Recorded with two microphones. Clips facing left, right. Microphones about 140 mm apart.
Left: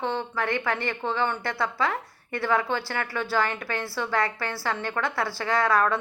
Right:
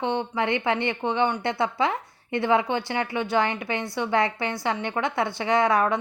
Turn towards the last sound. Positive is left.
turn(degrees=-20)  # may be behind; listen again after turning